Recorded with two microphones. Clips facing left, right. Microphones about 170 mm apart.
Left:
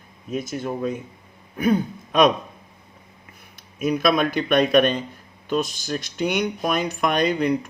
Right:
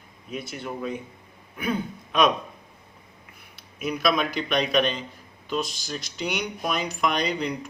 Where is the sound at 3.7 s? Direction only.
50° left (ahead or behind).